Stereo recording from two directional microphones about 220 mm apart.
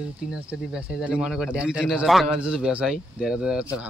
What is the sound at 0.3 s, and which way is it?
Speech, 5° right (ahead or behind).